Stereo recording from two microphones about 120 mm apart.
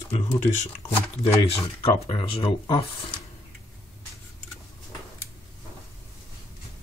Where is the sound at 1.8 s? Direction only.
50° left (ahead or behind).